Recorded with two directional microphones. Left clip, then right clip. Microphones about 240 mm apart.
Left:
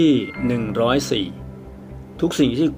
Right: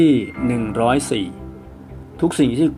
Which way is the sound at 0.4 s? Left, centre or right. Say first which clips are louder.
Right 2 dB; centre.